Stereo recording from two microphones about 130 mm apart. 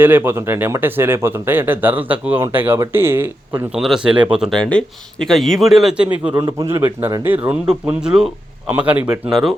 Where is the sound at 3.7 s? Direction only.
5° right (ahead or behind).